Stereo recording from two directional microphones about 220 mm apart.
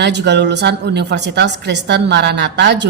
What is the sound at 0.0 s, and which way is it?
A woman's voice, 50° right (ahead or behind).